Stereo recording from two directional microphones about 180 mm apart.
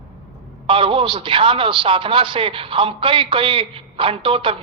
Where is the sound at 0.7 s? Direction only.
30° right (ahead or behind).